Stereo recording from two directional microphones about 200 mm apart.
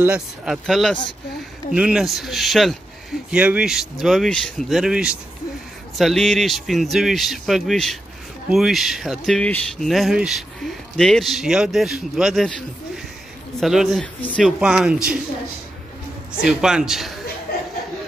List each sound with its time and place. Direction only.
0.0 s speech: 5° right (ahead or behind)
16.4 s speech: 5° right (ahead or behind)